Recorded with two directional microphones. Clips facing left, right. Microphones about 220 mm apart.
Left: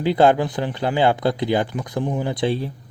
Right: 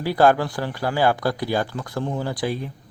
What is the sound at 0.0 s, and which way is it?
Speech, 20° left (ahead or behind).